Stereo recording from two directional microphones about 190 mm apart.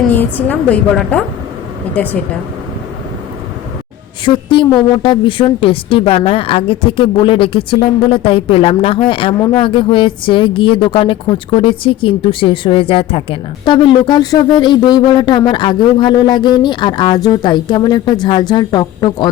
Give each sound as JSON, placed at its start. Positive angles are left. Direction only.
{"t": 0.1, "sound": "a woman's voice", "side_deg": 10}
{"t": 4.3, "sound": "speech", "side_deg": 25}